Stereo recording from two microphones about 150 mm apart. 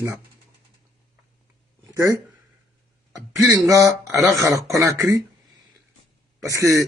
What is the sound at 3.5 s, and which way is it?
Speech, 20° right (ahead or behind).